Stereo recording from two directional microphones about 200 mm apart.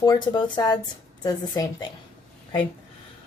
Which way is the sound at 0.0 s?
20° left (ahead or behind).